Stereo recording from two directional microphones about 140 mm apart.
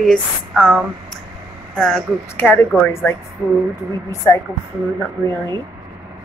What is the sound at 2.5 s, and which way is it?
Speech, 15° left (ahead or behind).